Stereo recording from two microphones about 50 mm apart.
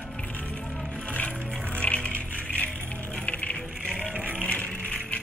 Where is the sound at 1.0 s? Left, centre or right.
Left.